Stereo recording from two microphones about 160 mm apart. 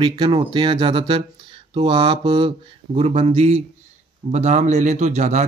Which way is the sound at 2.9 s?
40° right (ahead or behind).